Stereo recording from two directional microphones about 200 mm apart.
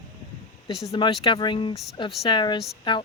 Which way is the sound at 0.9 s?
25° left (ahead or behind).